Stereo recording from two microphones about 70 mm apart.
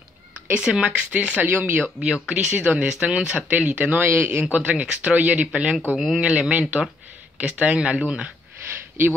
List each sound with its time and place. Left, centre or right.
0.5 s a man's voice: centre
5.9 s speech: centre